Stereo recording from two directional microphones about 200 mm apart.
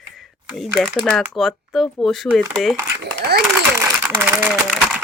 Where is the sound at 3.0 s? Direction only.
55° right (ahead or behind).